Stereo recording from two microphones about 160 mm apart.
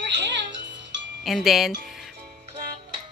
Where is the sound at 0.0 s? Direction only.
90° right.